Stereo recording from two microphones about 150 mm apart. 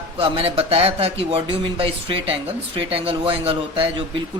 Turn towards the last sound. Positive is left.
turn(degrees=-35)  # may be behind; listen again after turning